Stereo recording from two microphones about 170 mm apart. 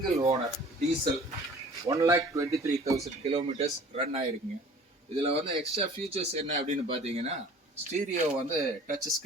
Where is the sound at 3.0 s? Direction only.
40° right (ahead or behind).